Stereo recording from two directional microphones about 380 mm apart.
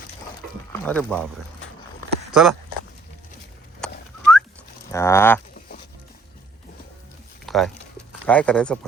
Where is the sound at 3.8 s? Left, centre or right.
Centre.